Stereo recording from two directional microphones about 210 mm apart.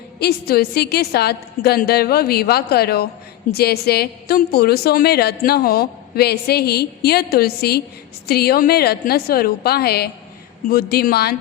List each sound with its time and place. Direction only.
0.2 s a woman's voice: 50° left (ahead or behind)